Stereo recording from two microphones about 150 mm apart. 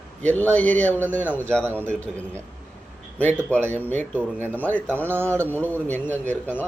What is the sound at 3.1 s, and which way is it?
A man's voice, 10° left (ahead or behind).